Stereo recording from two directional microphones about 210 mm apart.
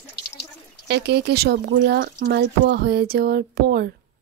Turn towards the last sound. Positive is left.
turn(degrees=-50)  # may be behind; listen again after turning